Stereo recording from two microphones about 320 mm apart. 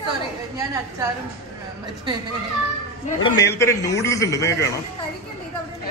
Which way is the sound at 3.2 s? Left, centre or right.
Centre.